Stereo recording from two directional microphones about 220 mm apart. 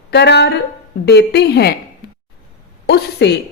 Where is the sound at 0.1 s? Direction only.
50° left (ahead or behind).